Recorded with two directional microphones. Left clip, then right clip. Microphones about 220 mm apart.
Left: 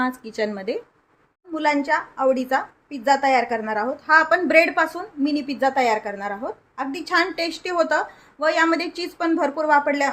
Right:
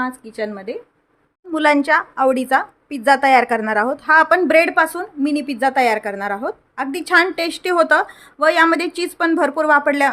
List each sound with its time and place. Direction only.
0.0 s speech: centre (ahead or behind)
1.5 s a woman's voice: 30° right (ahead or behind)